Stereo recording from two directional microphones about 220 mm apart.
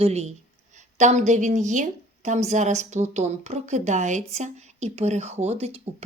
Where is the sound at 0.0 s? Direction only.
30° right (ahead or behind).